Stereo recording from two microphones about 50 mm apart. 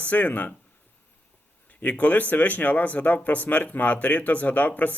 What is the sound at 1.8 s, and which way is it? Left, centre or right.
Speech, left.